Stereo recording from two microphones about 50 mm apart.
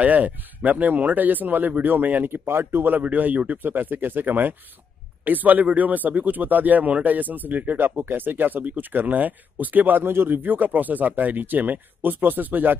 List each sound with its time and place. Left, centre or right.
0.0 s speech: right
3.0 s speech: right